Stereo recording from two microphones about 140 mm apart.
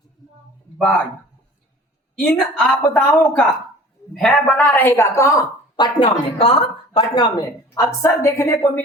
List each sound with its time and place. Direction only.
2.1 s a woman's voice: 10° left (ahead or behind)